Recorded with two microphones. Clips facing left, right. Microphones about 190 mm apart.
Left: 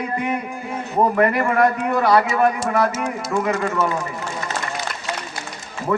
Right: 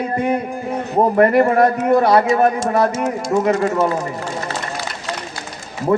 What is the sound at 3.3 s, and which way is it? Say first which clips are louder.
Speech: right 5 dB; 40° right (ahead or behind).